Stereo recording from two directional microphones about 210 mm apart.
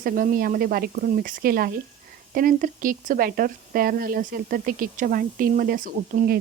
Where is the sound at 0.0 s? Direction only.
40° right (ahead or behind).